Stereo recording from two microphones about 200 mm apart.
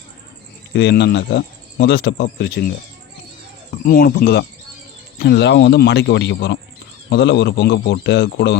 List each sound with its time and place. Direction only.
0.7 s speech: 60° left (ahead or behind)